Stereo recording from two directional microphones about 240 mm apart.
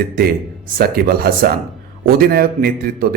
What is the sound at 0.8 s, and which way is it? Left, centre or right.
A man's voice, right.